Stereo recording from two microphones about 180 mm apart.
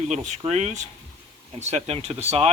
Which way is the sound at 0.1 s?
40° right (ahead or behind).